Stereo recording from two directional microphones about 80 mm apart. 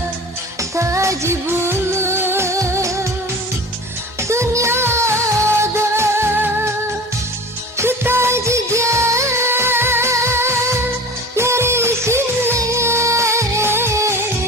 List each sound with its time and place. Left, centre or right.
0.8 s music: right
4.2 s music: right
7.8 s music of bollywood: right
11.3 s music: right